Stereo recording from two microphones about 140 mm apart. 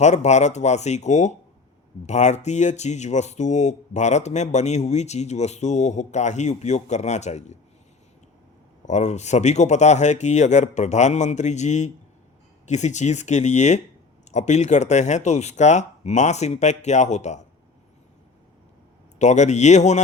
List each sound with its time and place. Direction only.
0.0 s speech: 55° left (ahead or behind)
8.9 s speech: 55° left (ahead or behind)
19.2 s speech: 55° left (ahead or behind)